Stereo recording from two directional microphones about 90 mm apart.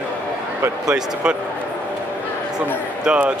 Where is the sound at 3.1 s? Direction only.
10° right (ahead or behind).